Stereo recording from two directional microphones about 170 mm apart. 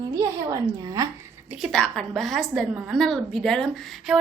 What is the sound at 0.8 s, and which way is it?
Speech, 20° right (ahead or behind).